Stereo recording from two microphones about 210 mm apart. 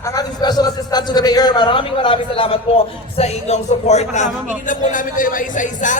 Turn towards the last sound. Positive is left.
turn(degrees=40)  # may be behind; listen again after turning